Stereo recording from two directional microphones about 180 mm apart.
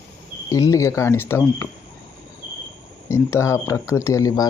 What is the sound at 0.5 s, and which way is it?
Speech, 20° left (ahead or behind).